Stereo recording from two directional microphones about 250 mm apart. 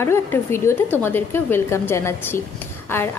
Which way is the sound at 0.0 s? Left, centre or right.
Centre.